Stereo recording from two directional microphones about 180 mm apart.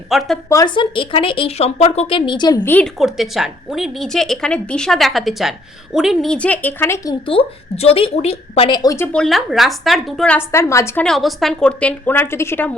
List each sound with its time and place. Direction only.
0.1 s a woman's voice: centre (ahead or behind)
0.5 s a woman's voice: 25° left (ahead or behind)
2.6 s a woman's voice: 5° left (ahead or behind)
9.1 s a woman's voice: centre (ahead or behind)
11.0 s a woman's voice: centre (ahead or behind)